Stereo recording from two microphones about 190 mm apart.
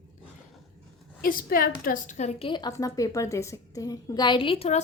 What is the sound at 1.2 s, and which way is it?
A woman's voice, 50° left (ahead or behind).